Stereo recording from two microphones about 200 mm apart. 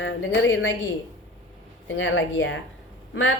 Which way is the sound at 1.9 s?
70° left (ahead or behind).